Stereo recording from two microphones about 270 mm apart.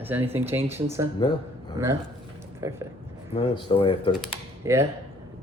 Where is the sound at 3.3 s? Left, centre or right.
Centre.